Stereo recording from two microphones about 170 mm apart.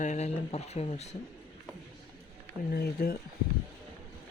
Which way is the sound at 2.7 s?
65° left (ahead or behind).